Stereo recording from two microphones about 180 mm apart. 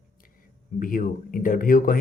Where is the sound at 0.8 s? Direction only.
50° left (ahead or behind).